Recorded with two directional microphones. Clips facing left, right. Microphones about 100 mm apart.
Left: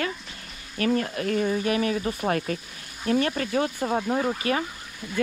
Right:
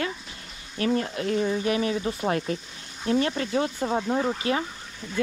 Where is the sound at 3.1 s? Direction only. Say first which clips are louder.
Even; 50° left (ahead or behind).